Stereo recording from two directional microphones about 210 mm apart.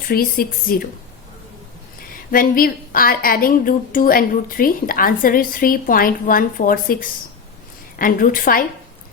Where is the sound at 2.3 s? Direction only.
40° left (ahead or behind).